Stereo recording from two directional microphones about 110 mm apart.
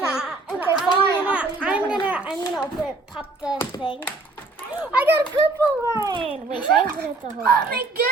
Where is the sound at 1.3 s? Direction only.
10° right (ahead or behind).